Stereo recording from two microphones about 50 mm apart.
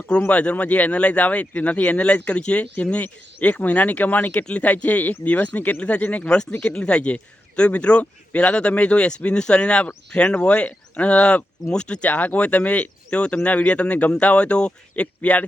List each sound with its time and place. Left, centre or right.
0.3 s speech: left